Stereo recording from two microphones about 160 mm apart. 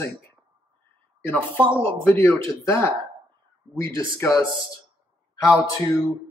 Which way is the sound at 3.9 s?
20° left (ahead or behind).